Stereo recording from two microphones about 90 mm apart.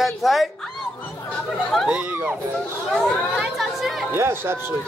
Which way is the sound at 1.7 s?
5° left (ahead or behind).